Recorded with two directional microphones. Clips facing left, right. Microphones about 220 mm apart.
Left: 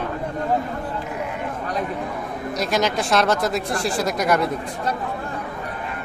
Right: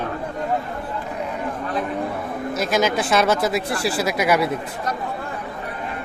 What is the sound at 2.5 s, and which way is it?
Speech, centre (ahead or behind).